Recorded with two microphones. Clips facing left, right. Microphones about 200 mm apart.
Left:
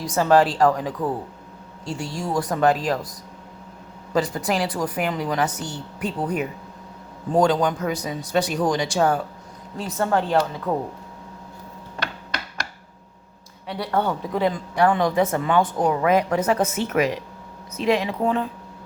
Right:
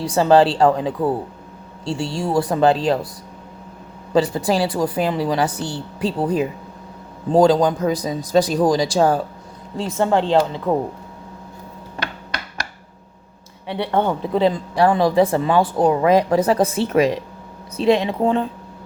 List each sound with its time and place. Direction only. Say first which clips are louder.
0.0 s speech: right 4 dB; 30° right (ahead or behind)
4.1 s speech: right 5 dB; 30° right (ahead or behind)
13.7 s speech: right 4 dB; 25° right (ahead or behind)